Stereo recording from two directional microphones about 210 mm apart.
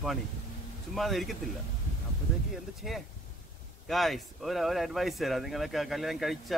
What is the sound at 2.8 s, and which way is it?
Speech, centre (ahead or behind).